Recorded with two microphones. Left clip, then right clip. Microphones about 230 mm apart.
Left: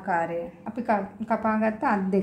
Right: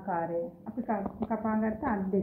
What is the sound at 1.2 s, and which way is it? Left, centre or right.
Speech, left.